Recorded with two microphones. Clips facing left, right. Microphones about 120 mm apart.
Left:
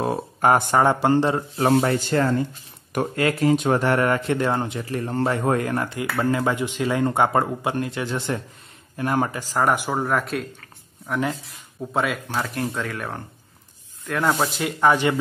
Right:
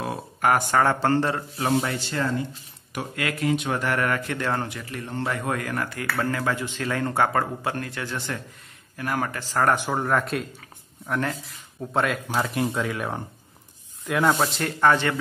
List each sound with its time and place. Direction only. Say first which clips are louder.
0.0 s a sound: left 4 dB; 30° left (ahead or behind)
0.7 s speech: left 3 dB; 15° left (ahead or behind)
1.6 s speech: left 6 dB; 50° left (ahead or behind)
3.2 s speech: left 5 dB; 35° left (ahead or behind)
4.8 s speech: left 6 dB; 35° left (ahead or behind)
9.4 s speech: left 1 dB; 10° left (ahead or behind)
14.4 s speech: left 1 dB; 10° left (ahead or behind)